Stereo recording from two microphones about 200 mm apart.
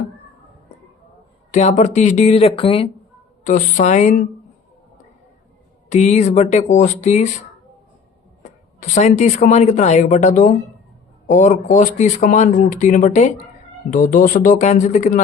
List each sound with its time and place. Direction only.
1.5 s speech: 40° left (ahead or behind)
3.4 s speech: 40° left (ahead or behind)
5.9 s speech: 35° left (ahead or behind)
8.8 s speech: 35° left (ahead or behind)